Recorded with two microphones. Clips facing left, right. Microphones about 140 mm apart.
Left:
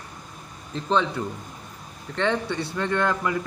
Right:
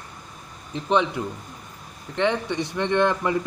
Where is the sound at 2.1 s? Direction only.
15° right (ahead or behind).